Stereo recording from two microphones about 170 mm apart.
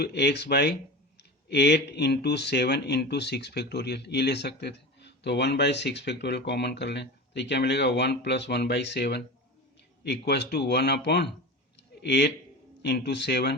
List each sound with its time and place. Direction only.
0.0 s speech: 75° left (ahead or behind)